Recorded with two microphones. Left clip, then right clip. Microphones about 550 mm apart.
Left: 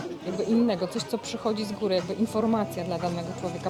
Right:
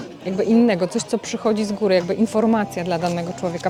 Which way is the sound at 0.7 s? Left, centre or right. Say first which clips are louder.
Right 8 dB; right.